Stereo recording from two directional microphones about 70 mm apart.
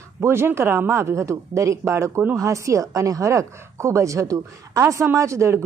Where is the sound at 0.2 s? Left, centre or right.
Right.